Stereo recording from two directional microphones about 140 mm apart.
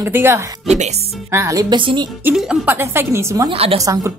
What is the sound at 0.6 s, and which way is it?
Speech, 55° right (ahead or behind).